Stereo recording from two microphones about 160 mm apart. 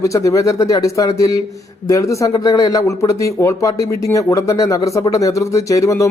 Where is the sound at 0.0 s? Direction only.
20° left (ahead or behind).